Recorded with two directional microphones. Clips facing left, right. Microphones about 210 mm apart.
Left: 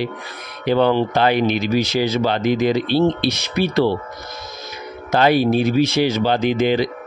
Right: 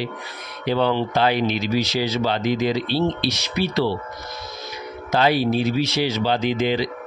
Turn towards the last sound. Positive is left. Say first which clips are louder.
# left 4 dB
turn(degrees=50)  # may be behind; listen again after turning